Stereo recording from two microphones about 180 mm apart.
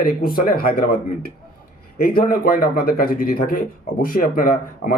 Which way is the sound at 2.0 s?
55° left (ahead or behind).